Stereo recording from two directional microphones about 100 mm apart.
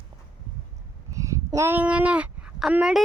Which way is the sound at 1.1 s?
30° right (ahead or behind).